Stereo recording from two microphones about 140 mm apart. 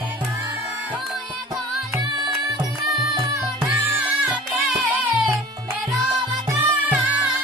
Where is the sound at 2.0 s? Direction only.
30° right (ahead or behind).